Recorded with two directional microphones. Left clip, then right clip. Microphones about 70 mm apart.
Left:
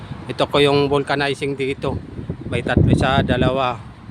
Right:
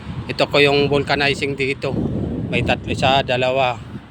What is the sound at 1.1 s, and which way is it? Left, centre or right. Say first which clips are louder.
Speech: right 2 dB; left.